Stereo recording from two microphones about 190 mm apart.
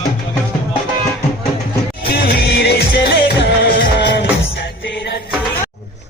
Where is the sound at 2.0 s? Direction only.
55° left (ahead or behind).